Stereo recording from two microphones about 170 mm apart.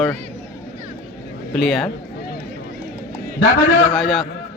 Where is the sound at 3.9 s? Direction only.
Centre (ahead or behind).